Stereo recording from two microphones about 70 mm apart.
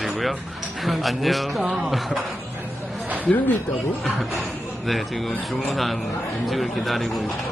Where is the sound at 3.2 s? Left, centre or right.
Left.